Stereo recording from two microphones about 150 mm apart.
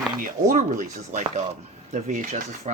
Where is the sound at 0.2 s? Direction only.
65° right (ahead or behind).